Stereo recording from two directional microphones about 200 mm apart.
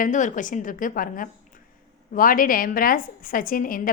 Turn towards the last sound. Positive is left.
turn(degrees=45)  # may be behind; listen again after turning